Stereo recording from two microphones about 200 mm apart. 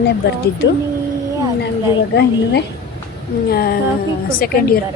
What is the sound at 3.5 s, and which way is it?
A woman's voice, 50° left (ahead or behind).